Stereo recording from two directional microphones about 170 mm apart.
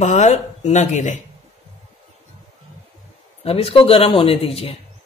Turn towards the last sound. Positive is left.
turn(degrees=35)  # may be behind; listen again after turning